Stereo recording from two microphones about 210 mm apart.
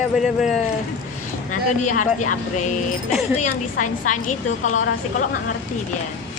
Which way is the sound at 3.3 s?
40° left (ahead or behind).